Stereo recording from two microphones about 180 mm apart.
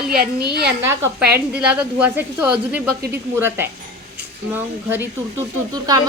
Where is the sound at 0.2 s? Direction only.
65° right (ahead or behind).